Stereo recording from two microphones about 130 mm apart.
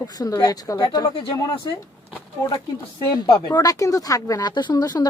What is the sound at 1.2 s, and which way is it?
Speech, 40° left (ahead or behind).